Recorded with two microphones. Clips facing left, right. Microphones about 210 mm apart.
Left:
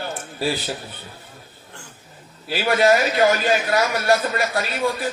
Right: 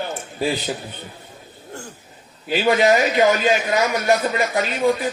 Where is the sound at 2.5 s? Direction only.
20° right (ahead or behind).